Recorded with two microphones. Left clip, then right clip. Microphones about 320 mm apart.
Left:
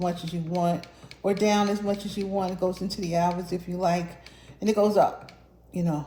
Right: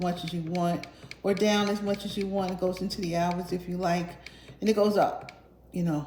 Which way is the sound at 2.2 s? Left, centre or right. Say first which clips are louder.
Left 1 dB; left.